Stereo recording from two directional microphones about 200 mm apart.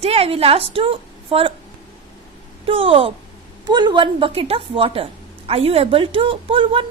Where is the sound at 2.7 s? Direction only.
25° right (ahead or behind).